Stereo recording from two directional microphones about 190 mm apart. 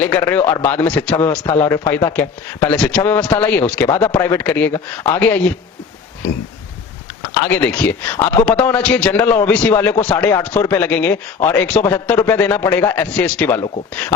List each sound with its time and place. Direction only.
0.0 s speech: 10° left (ahead or behind)
7.4 s speech: 10° left (ahead or behind)